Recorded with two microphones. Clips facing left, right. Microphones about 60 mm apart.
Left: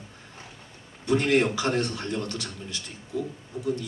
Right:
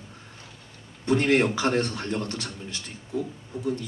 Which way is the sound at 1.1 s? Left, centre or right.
Right.